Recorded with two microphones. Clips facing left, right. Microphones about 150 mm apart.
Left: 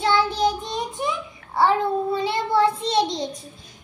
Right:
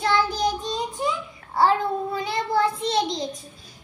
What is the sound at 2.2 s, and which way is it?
Child singing, 30° left (ahead or behind).